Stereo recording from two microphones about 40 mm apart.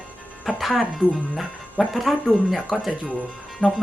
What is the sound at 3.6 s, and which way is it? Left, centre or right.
Speech, left.